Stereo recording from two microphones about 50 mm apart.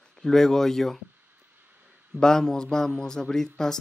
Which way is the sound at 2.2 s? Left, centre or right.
Centre.